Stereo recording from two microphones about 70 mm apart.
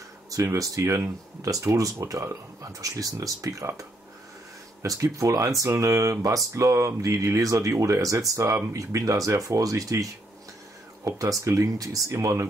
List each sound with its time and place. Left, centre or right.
0.6 s speech: right
4.8 s speech: right
11.1 s speech: right